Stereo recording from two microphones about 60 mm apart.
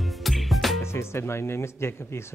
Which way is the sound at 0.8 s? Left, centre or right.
Left.